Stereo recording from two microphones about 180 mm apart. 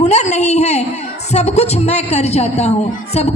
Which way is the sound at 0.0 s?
40° left (ahead or behind).